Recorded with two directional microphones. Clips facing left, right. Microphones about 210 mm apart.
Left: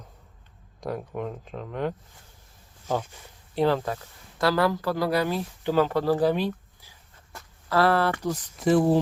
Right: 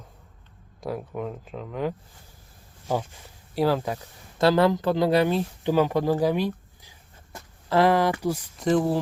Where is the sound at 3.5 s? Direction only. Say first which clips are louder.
Even; 5° right (ahead or behind).